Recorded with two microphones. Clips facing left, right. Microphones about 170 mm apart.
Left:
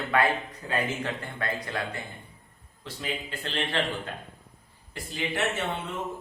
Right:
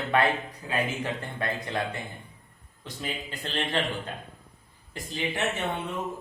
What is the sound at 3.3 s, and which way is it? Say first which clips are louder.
Speech: right 3 dB; 15° right (ahead or behind).